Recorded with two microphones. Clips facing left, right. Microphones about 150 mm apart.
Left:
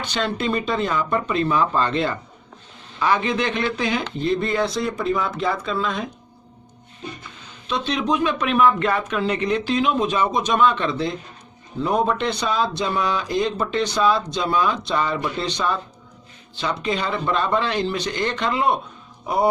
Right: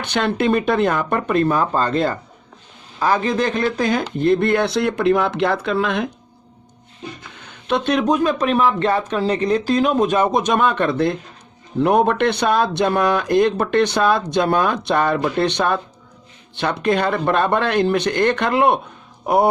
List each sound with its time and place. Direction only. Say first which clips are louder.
0.0 s speech: right 5 dB; 55° right (ahead or behind); by 6.1 s 75° right (ahead or behind)
7.7 s speech: right 5 dB; 55° right (ahead or behind)